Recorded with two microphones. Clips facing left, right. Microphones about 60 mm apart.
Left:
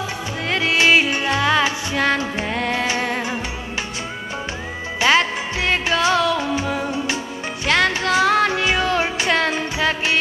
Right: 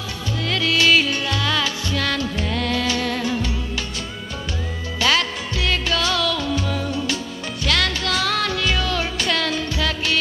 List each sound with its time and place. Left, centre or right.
0.5 s music: left
5.0 s music: left